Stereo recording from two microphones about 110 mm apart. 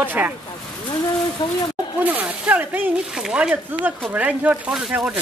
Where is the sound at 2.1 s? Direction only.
15° right (ahead or behind).